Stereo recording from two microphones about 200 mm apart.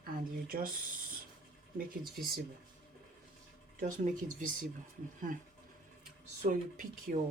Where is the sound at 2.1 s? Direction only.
50° right (ahead or behind).